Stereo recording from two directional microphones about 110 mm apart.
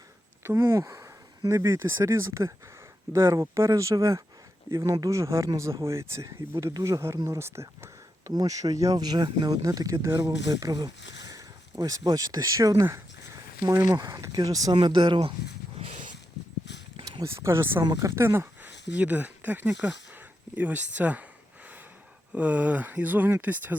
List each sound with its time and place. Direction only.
0.6 s speech: 30° right (ahead or behind)
8.3 s speech: 35° right (ahead or behind)
14.8 s speech: 45° right (ahead or behind)
15.8 s a sound: 60° right (ahead or behind)
17.3 s speech: 25° right (ahead or behind)
17.8 s speech: 30° right (ahead or behind); by 21.2 s 15° right (ahead or behind)
22.4 s speech: 10° right (ahead or behind)